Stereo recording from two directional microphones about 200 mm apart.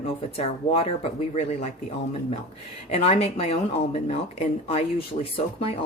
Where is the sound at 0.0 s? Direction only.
30° left (ahead or behind).